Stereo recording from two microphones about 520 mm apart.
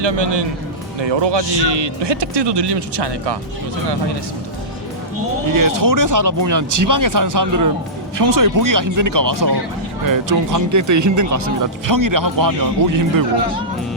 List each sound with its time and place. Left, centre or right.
0.0 s speech: right
5.5 s speech: right